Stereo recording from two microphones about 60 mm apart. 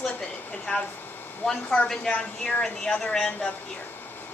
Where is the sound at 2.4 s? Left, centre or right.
Centre.